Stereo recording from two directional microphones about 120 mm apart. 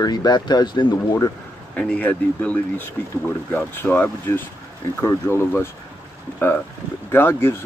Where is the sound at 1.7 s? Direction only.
10° left (ahead or behind).